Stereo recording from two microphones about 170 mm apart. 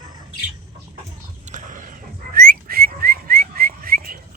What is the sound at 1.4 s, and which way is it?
Whistling, 45° right (ahead or behind).